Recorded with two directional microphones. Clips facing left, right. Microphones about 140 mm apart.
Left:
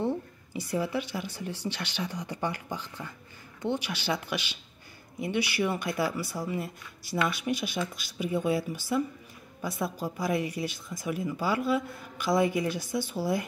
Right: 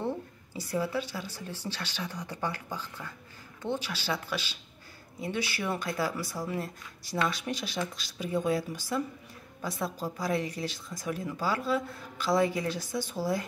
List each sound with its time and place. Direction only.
0.0 s speech: 15° left (ahead or behind)